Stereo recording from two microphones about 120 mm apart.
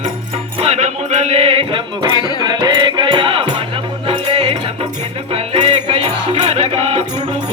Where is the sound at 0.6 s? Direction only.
70° right (ahead or behind).